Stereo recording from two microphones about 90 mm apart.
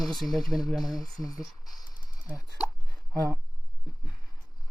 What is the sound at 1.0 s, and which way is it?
Speech, 45° left (ahead or behind).